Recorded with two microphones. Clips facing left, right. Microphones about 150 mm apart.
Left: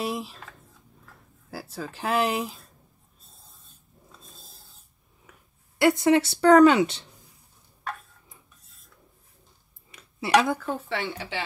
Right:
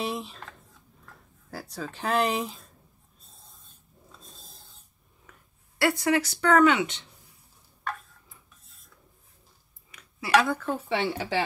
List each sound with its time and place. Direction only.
0.0 s speech: centre (ahead or behind)
4.1 s filing: centre (ahead or behind)
5.8 s speech: 20° left (ahead or behind)
9.8 s a sound: 30° left (ahead or behind)
10.3 s speech: 15° left (ahead or behind)
10.6 s speech: centre (ahead or behind)
11.1 s speech: 40° right (ahead or behind)